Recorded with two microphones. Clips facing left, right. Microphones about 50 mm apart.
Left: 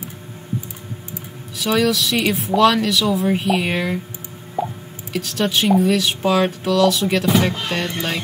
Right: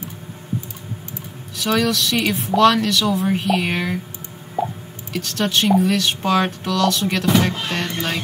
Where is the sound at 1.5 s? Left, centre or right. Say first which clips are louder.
Left 1 dB; centre.